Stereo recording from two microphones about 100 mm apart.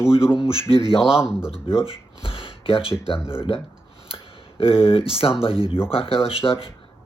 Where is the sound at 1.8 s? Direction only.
65° left (ahead or behind).